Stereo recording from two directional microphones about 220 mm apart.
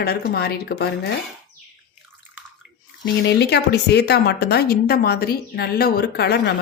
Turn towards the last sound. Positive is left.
turn(degrees=45)  # may be behind; listen again after turning